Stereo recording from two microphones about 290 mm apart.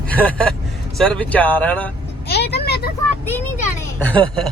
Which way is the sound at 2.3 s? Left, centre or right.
Left.